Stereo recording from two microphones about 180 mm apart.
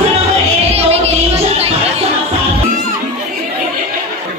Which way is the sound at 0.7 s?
35° right (ahead or behind).